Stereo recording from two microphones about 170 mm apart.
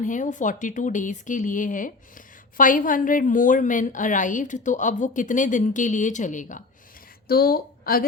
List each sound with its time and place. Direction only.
0.0 s a woman's voice: 45° left (ahead or behind)
7.3 s a woman's voice: 65° left (ahead or behind)